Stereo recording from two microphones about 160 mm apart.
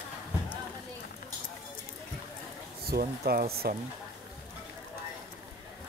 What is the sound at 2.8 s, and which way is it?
Speech, 75° right (ahead or behind).